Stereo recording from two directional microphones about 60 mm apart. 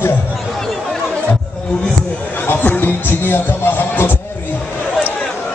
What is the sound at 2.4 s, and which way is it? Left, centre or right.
Music, left.